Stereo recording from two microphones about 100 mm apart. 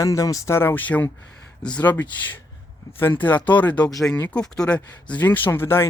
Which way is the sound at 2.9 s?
20° left (ahead or behind).